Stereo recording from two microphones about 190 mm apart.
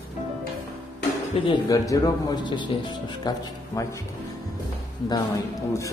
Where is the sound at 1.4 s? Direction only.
20° left (ahead or behind).